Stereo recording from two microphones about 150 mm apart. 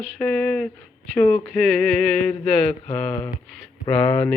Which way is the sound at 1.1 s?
10° left (ahead or behind).